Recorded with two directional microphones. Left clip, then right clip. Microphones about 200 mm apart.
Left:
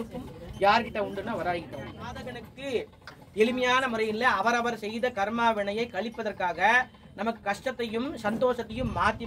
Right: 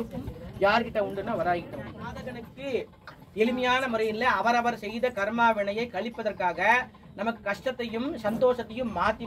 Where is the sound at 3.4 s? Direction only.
30° left (ahead or behind).